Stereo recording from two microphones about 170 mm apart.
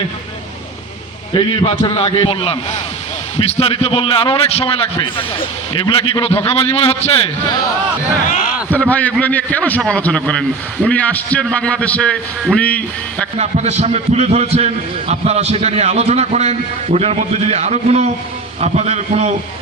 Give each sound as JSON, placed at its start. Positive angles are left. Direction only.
{"t": 1.3, "sound": "a man's voice", "side_deg": 30}
{"t": 8.7, "sound": "a man's voice", "side_deg": 10}
{"t": 13.4, "sound": "a man's voice", "side_deg": -40}